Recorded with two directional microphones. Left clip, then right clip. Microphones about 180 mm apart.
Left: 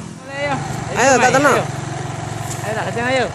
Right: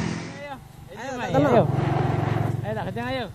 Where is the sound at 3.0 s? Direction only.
40° right (ahead or behind).